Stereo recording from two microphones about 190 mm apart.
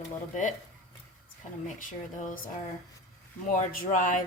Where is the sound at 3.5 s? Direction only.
45° left (ahead or behind).